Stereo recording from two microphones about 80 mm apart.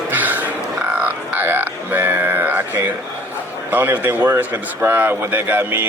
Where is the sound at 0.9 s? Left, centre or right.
Right.